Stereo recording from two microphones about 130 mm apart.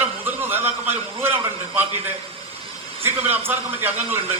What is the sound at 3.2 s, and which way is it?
Speech, 15° right (ahead or behind).